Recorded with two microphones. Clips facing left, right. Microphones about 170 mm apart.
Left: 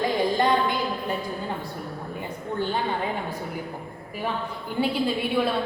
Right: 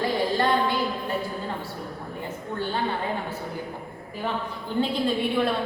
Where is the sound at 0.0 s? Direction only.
15° left (ahead or behind).